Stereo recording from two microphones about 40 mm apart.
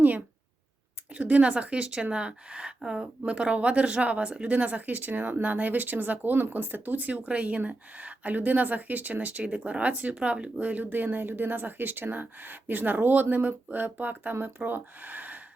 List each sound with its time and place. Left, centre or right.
1.1 s a woman's voice: right
10.7 s speech: right